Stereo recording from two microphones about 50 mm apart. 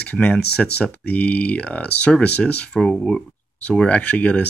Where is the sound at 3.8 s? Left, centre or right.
Left.